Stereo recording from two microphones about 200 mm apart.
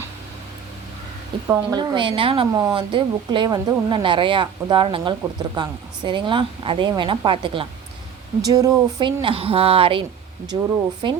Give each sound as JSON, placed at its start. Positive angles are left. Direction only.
{"t": 1.5, "sound": "a woman's voice", "side_deg": -10}
{"t": 1.8, "sound": "a woman's voice", "side_deg": -25}
{"t": 11.0, "sound": "a woman's voice", "side_deg": -25}